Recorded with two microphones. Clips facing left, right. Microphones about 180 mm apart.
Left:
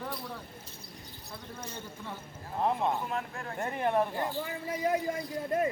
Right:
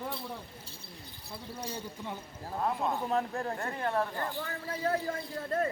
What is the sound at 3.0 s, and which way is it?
Speech, 35° right (ahead or behind).